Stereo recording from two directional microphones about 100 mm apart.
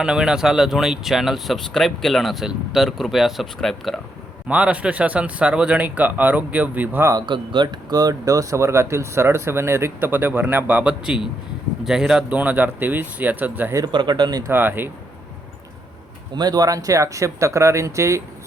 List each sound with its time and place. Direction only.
0.0 s speech: 5° right (ahead or behind)
4.4 s speech: 10° right (ahead or behind)
7.1 s speech: 45° right (ahead or behind); by 13.7 s 20° right (ahead or behind)
13.8 s speech: 45° right (ahead or behind)
14.4 s speech: 20° right (ahead or behind)
16.3 s speech: 45° right (ahead or behind)